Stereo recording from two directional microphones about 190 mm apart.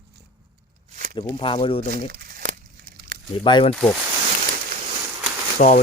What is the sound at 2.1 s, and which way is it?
Crumpling, 45° right (ahead or behind).